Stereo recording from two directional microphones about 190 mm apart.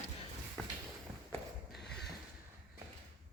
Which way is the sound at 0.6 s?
5° left (ahead or behind).